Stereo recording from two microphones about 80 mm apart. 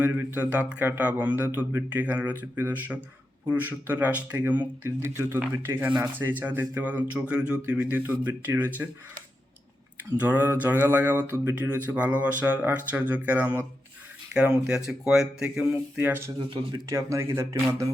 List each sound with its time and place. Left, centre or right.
0.0 s speech: right
10.2 s speech: right
16.0 s speech: right
16.9 s speech: right